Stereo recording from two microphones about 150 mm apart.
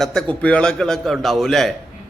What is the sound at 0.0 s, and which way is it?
A man's voice, 5° left (ahead or behind).